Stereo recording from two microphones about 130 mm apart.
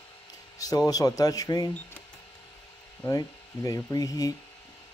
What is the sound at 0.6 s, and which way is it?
Speech, 30° left (ahead or behind).